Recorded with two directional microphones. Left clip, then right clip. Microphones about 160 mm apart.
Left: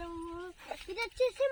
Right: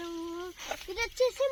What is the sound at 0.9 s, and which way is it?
Speech, 25° right (ahead or behind).